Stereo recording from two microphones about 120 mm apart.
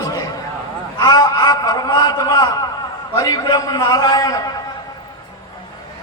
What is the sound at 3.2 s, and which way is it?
A man's voice, 35° left (ahead or behind).